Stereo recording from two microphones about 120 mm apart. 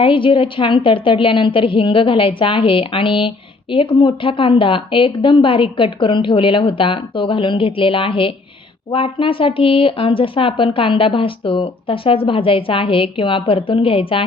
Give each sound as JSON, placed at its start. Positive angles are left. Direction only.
{"t": 0.0, "sound": "a woman's voice", "side_deg": 45}